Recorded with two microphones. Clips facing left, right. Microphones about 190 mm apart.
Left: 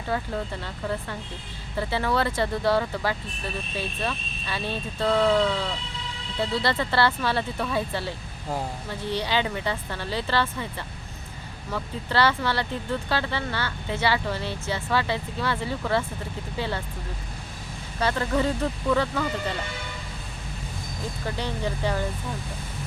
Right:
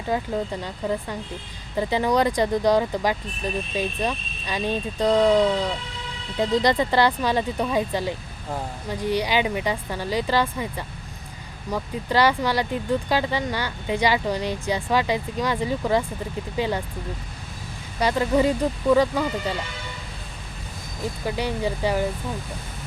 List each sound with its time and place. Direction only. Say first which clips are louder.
0.1 s speech: right 4 dB; 15° right (ahead or behind)
18.0 s speech: right 4 dB; 15° right (ahead or behind)
21.2 s speech: right 4 dB; 10° right (ahead or behind)